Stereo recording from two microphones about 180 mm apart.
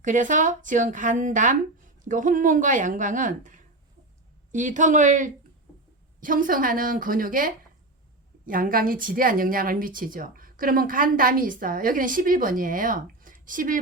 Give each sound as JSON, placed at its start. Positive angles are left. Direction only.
{"t": 0.0, "sound": "a woman's voice", "side_deg": -45}